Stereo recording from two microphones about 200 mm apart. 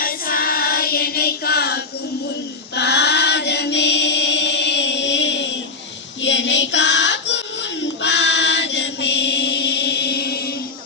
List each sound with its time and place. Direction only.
0.0 s child singing: 45° left (ahead or behind)
2.7 s choir: 55° left (ahead or behind)
6.2 s a sound: 65° left (ahead or behind)